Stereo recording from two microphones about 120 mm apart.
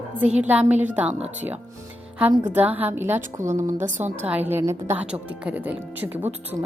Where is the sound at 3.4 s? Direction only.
90° right.